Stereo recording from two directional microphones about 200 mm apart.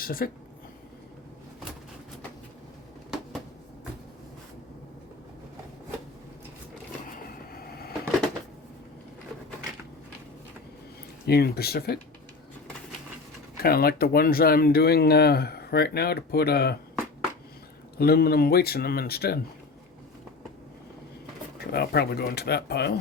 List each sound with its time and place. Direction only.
0.0 s speech: 45° left (ahead or behind)
7.5 s a sound: 50° left (ahead or behind)
11.3 s speech: 50° left (ahead or behind)
13.6 s speech: 50° left (ahead or behind)
17.9 s speech: 50° left (ahead or behind)
21.7 s speech: 55° left (ahead or behind)